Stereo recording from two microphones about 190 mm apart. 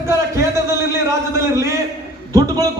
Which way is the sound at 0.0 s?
15° right (ahead or behind).